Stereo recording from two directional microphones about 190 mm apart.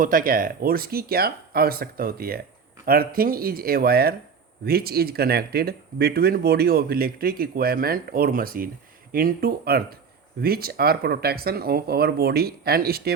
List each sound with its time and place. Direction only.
0.0 s speech: 45° right (ahead or behind)